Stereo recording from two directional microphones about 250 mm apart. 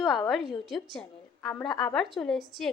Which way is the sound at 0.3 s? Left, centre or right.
Centre.